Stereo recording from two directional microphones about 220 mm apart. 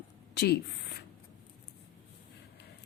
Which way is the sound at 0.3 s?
45° left (ahead or behind).